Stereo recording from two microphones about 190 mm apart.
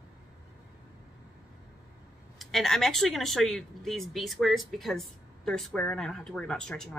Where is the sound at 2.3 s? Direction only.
Centre (ahead or behind).